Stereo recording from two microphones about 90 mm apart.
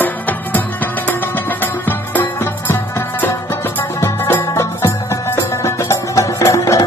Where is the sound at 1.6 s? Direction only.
20° left (ahead or behind).